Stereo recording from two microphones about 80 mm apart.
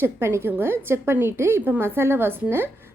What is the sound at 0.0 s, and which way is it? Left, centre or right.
A woman's voice, right.